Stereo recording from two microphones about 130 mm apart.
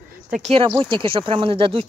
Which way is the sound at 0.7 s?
40° right (ahead or behind).